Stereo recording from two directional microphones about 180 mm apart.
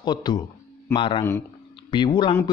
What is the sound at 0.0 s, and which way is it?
A man's voice, 25° left (ahead or behind).